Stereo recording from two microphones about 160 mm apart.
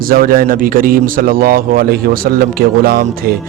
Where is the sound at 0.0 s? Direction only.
65° right (ahead or behind).